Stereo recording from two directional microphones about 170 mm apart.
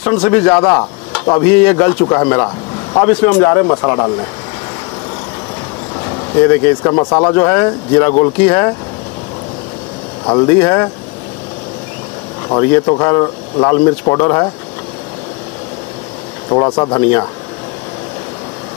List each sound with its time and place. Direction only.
0.0 s speech: 25° left (ahead or behind)
6.4 s speech: 20° left (ahead or behind)
10.2 s speech: 25° left (ahead or behind)
12.7 s speech: 20° left (ahead or behind)
16.4 s speech: 30° left (ahead or behind)